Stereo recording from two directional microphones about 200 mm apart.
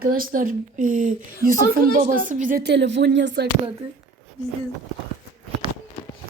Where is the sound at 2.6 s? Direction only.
60° right (ahead or behind).